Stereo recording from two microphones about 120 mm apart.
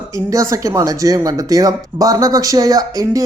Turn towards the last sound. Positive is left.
turn(degrees=-30)  # may be behind; listen again after turning